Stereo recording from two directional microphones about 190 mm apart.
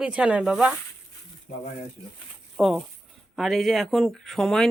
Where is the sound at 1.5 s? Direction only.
50° left (ahead or behind).